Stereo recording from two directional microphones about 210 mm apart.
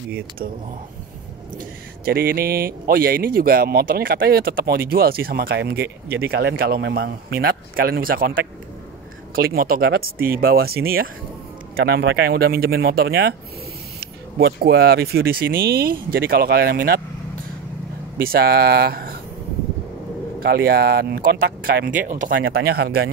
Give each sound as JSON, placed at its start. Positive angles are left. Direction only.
{"t": 2.0, "sound": "speech", "side_deg": -45}
{"t": 9.3, "sound": "speech", "side_deg": -45}
{"t": 18.1, "sound": "speech", "side_deg": -45}
{"t": 20.3, "sound": "speech", "side_deg": -50}
{"t": 22.3, "sound": "speech", "side_deg": -55}